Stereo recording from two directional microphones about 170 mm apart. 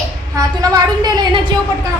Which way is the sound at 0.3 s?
20° right (ahead or behind).